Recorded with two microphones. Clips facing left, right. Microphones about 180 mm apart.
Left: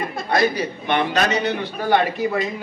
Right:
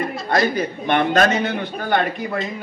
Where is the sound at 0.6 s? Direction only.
50° right (ahead or behind).